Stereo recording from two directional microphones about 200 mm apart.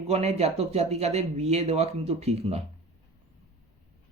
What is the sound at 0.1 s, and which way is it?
Speech, 30° right (ahead or behind).